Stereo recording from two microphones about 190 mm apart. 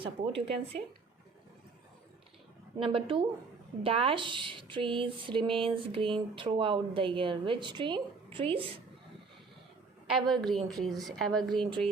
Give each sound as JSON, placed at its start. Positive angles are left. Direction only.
{"t": 0.0, "sound": "speech", "side_deg": -30}
{"t": 2.7, "sound": "speech", "side_deg": -30}
{"t": 10.1, "sound": "a woman's voice", "side_deg": 0}